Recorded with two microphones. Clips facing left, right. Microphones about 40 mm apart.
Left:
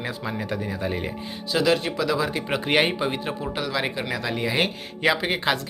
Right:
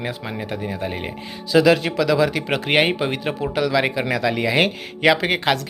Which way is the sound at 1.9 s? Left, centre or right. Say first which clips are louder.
Right 6 dB; right.